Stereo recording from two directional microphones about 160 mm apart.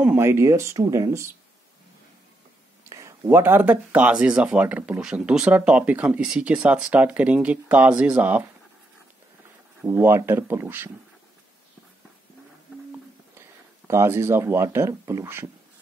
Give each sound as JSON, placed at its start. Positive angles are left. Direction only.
{"t": 0.0, "sound": "speech", "side_deg": -10}
{"t": 2.8, "sound": "speech", "side_deg": -20}
{"t": 9.8, "sound": "speech", "side_deg": -15}
{"t": 13.8, "sound": "speech", "side_deg": -15}